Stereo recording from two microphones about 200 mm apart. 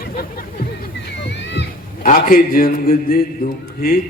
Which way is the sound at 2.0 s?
45° left (ahead or behind).